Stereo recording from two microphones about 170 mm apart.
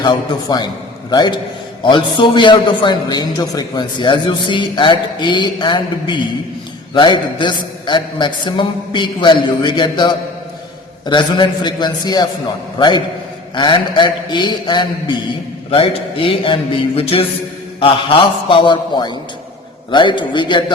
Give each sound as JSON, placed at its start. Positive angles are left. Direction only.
{"t": 1.1, "sound": "a man's voice", "side_deg": 25}
{"t": 13.6, "sound": "a man's voice", "side_deg": 25}